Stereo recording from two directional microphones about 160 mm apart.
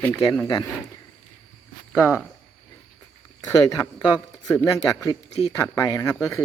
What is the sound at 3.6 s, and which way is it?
Speech, 20° left (ahead or behind).